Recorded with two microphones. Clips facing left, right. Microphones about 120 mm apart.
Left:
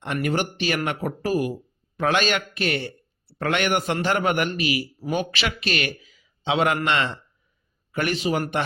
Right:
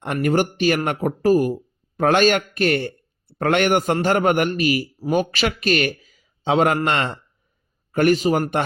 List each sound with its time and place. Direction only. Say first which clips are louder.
0.0 s speech: right 5 dB; 45° right (ahead or behind)